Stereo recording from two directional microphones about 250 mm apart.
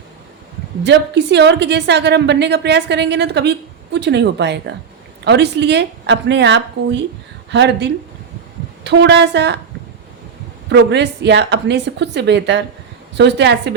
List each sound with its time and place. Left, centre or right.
0.9 s a woman's voice: right
10.7 s a woman's voice: right